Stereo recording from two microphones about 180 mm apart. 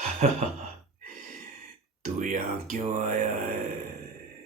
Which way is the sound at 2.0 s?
45° right (ahead or behind).